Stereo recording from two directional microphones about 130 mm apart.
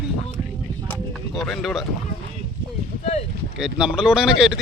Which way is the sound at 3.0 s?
60° left (ahead or behind).